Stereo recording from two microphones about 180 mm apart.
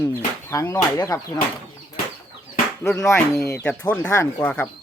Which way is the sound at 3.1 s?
15° left (ahead or behind).